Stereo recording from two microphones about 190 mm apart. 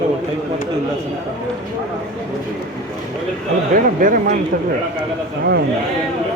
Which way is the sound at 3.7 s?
45° right (ahead or behind).